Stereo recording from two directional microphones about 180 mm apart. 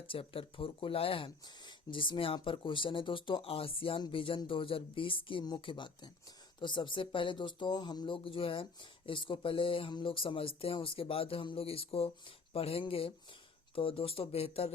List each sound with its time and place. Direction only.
0.1 s speech: 30° left (ahead or behind)